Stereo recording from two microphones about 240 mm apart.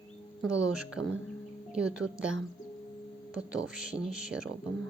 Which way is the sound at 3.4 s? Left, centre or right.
Centre.